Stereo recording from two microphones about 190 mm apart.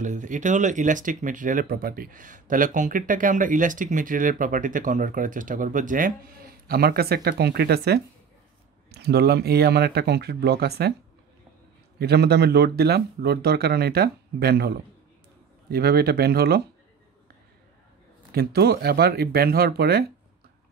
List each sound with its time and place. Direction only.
0.0 s speech: 40° right (ahead or behind); by 11.0 s 60° right (ahead or behind)
12.0 s speech: 55° right (ahead or behind)
18.3 s speech: 55° right (ahead or behind)